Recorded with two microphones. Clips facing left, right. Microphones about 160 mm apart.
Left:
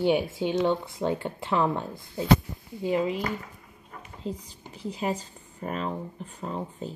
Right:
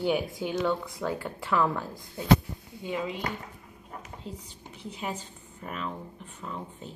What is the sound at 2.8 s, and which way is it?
Speech, 35° left (ahead or behind).